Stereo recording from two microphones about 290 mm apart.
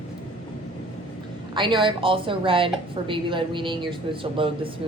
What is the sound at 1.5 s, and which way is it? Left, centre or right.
A woman's voice, centre.